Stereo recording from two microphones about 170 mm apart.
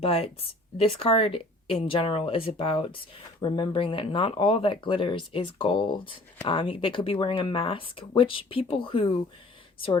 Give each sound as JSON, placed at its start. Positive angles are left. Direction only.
{"t": 0.0, "sound": "speech", "side_deg": 35}